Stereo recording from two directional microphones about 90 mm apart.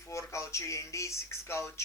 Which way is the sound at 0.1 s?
35° left (ahead or behind).